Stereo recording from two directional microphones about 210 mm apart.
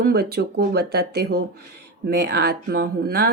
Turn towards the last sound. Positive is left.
turn(degrees=-50)  # may be behind; listen again after turning